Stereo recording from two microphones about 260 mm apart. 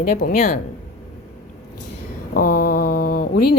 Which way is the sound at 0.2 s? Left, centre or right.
Left.